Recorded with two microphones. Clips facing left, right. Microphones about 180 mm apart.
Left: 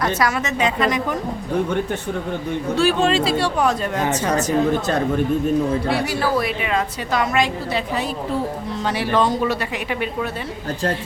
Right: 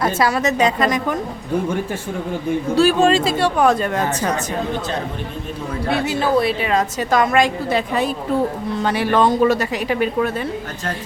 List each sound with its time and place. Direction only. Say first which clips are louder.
0.0 s a woman's voice: right 3 dB; 30° right (ahead or behind)
2.7 s a woman's voice: right 3 dB; 40° right (ahead or behind)
5.9 s a woman's voice: right 2 dB; 25° right (ahead or behind)
6.6 s a woman's voice: right 3 dB; 40° right (ahead or behind)